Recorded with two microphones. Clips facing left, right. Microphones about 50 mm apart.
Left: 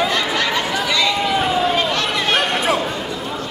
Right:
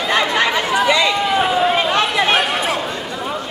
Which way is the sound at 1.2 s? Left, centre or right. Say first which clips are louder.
Right 2 dB; centre.